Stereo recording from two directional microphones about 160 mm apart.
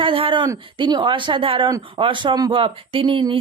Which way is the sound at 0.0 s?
35° right (ahead or behind).